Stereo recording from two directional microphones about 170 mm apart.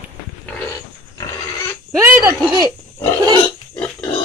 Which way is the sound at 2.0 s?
15° right (ahead or behind).